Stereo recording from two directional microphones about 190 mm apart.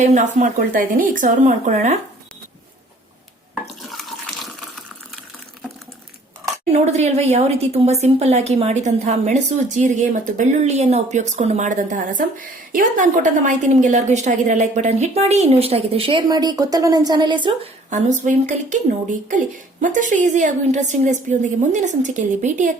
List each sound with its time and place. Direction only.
0.0 s a woman's voice: 40° right (ahead or behind)
3.5 s water: centre (ahead or behind)
6.7 s a woman's voice: 35° right (ahead or behind)
17.9 s a woman's voice: 40° right (ahead or behind)
19.8 s a woman's voice: 40° right (ahead or behind)